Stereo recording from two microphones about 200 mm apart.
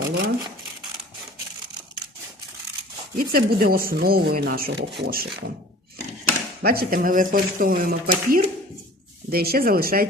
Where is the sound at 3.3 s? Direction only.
45° right (ahead or behind).